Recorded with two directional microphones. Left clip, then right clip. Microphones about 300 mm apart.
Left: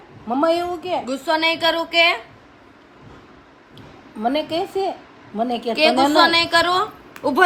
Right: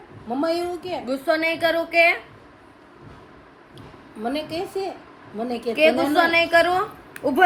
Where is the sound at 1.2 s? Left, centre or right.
Centre.